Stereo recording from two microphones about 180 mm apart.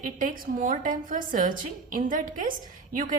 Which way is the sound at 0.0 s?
50° right (ahead or behind).